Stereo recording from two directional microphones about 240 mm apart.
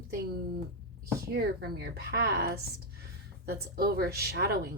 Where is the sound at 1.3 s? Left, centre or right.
Right.